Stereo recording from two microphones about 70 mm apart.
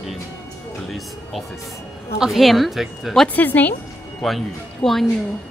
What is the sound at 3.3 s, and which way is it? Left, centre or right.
Speech, left.